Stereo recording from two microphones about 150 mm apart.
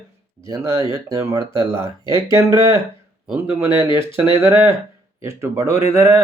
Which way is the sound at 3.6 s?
30° left (ahead or behind).